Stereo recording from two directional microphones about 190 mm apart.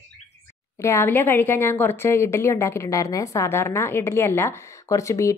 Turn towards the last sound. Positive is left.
turn(degrees=15)  # may be behind; listen again after turning